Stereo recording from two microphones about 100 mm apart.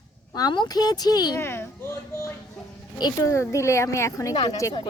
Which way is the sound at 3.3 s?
30° left (ahead or behind).